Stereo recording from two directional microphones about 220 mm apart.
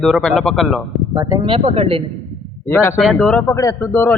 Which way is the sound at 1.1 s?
15° right (ahead or behind).